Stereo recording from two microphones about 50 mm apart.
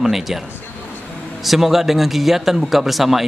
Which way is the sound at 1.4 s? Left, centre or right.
Centre.